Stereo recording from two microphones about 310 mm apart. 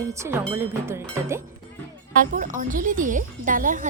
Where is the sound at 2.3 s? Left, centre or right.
Right.